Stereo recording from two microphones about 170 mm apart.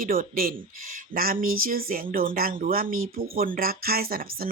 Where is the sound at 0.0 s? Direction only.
55° right (ahead or behind).